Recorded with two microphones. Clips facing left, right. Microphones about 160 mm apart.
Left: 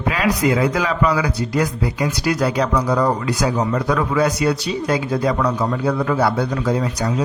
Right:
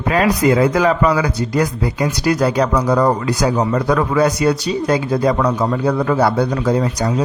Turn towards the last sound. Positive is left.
turn(degrees=-40)  # may be behind; listen again after turning